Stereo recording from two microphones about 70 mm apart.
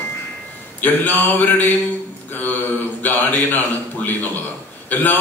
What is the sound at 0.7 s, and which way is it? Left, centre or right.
A man's voice, left.